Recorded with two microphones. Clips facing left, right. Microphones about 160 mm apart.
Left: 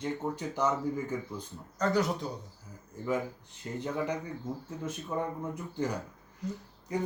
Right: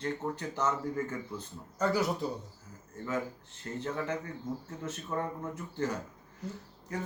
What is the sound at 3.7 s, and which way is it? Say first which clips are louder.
Speech: left 2 dB; 15° left (ahead or behind).